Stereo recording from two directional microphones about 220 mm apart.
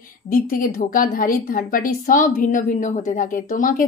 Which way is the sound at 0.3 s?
40° left (ahead or behind).